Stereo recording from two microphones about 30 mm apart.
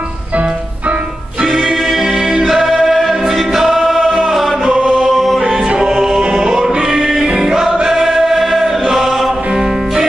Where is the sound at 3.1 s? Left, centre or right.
Centre.